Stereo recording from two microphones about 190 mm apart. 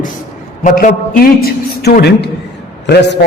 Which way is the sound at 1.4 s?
55° left (ahead or behind).